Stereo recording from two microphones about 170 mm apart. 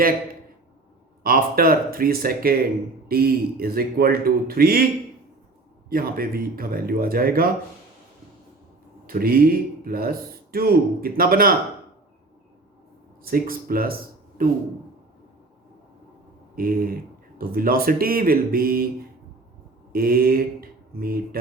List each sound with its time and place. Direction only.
1.2 s speech: 60° right (ahead or behind)
5.9 s speech: 60° right (ahead or behind)
9.0 s speech: 60° right (ahead or behind)
13.2 s speech: 60° right (ahead or behind)
16.6 s speech: 60° right (ahead or behind)
19.9 s mantra: 60° right (ahead or behind)